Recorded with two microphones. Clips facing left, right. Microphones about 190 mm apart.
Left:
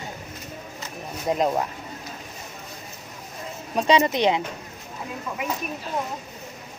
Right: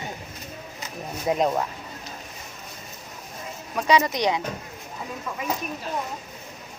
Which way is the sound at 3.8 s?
25° left (ahead or behind).